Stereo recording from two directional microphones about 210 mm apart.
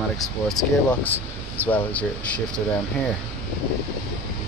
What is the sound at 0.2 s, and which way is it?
Speech, 5° left (ahead or behind).